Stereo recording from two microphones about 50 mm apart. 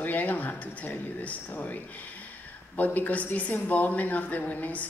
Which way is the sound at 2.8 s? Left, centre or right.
Left.